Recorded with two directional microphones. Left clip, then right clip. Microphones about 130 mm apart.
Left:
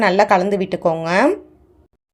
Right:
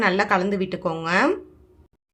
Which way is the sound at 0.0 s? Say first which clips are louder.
Left 6 dB; 35° left (ahead or behind).